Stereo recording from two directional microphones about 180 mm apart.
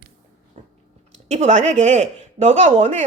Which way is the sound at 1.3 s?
40° right (ahead or behind).